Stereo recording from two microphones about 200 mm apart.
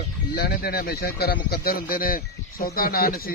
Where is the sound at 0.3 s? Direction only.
50° left (ahead or behind).